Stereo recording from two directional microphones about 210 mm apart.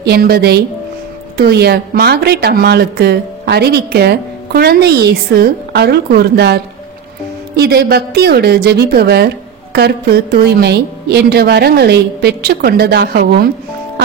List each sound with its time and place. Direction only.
0.0 s a woman's voice: 50° right (ahead or behind)